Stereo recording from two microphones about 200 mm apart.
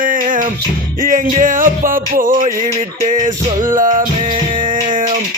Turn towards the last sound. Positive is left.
turn(degrees=-40)  # may be behind; listen again after turning